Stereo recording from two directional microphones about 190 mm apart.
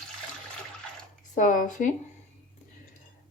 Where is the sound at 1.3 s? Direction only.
45° left (ahead or behind).